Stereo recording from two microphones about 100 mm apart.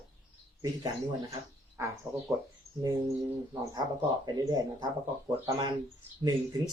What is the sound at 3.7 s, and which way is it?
Speech, 45° right (ahead or behind).